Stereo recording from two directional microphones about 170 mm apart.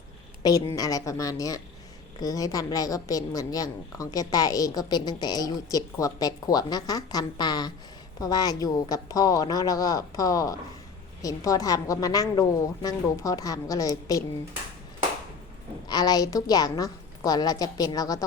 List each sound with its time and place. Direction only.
0.4 s a woman's voice: 20° left (ahead or behind)
15.9 s a woman's voice: 25° left (ahead or behind)